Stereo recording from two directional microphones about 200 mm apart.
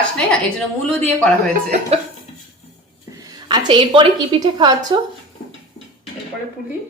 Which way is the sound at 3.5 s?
25° right (ahead or behind).